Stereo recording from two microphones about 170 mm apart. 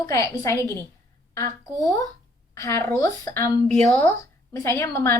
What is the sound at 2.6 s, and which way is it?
A woman's voice, 15° left (ahead or behind).